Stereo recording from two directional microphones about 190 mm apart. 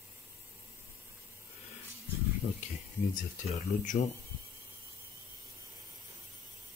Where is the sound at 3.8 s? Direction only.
45° left (ahead or behind).